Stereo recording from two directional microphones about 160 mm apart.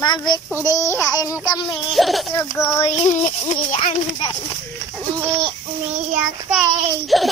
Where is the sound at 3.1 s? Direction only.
50° left (ahead or behind).